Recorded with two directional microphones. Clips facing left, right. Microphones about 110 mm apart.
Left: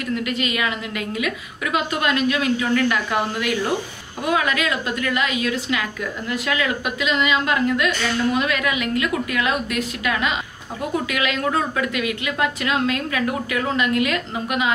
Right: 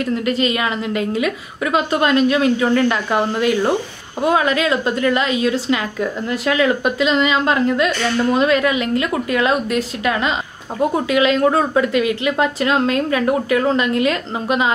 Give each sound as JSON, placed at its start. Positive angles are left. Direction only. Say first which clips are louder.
{"t": 0.0, "sound": "a woman's voice", "louder": "right 6 dB", "side_deg": -35}